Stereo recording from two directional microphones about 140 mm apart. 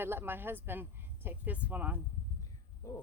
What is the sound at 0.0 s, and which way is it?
Speech, 15° right (ahead or behind).